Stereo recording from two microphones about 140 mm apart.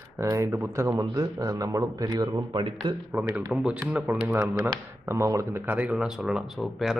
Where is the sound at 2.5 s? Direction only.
35° right (ahead or behind).